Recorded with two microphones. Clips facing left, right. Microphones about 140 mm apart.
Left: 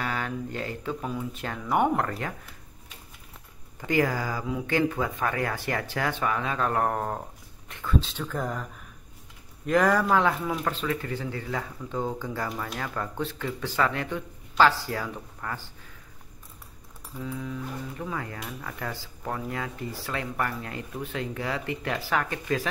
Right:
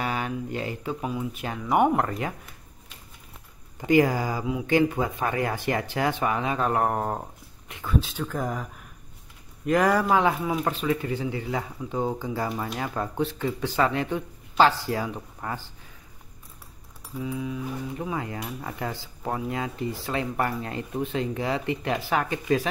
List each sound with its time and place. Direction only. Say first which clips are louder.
0.0 s speech: right 2 dB; 15° right (ahead or behind)
3.8 s speech: right 5 dB; 20° right (ahead or behind)
7.6 s a sound: even; 15° right (ahead or behind)
8.2 s speech: right 2 dB; 5° right (ahead or behind)
9.7 s speech: right 1 dB; 5° right (ahead or behind)
10.1 s speech: right 2 dB; 15° right (ahead or behind)
17.2 s speech: right 3 dB; 10° right (ahead or behind)
17.9 s speech: right 3 dB; 20° right (ahead or behind)